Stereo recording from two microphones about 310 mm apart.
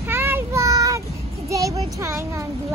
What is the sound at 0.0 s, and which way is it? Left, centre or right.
Child singing, centre.